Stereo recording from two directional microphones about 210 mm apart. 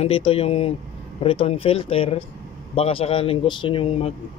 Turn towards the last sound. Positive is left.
turn(degrees=25)  # may be behind; listen again after turning